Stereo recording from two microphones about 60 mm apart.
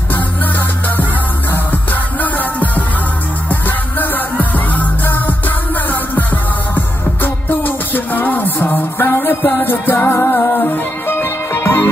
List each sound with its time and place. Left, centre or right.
1.5 s music: left
10.1 s music: left
10.6 s music: left